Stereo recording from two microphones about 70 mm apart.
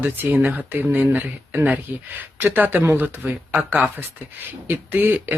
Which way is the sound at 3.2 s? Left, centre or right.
Right.